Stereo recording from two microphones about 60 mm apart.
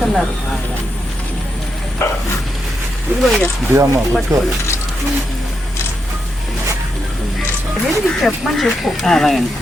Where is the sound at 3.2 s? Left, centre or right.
Centre.